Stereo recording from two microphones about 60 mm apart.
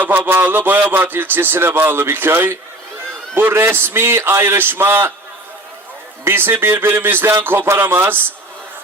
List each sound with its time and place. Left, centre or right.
0.0 s a man's voice: right
6.2 s a man's voice: right